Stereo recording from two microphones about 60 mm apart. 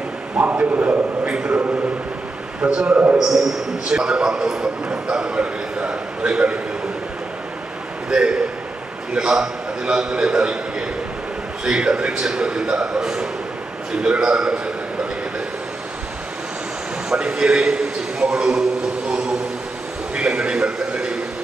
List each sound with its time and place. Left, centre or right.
0.4 s a man's voice: right
3.2 s a man's voice: centre
8.1 s a man's voice: centre
17.1 s a man's voice: centre
20.2 s a sound: centre